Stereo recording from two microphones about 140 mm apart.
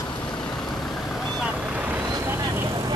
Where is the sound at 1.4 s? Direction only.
10° right (ahead or behind).